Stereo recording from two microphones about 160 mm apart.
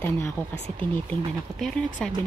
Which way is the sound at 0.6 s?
35° right (ahead or behind).